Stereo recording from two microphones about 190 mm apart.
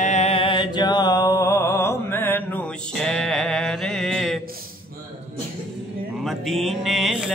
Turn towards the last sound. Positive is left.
turn(degrees=0)  # may be behind; listen again after turning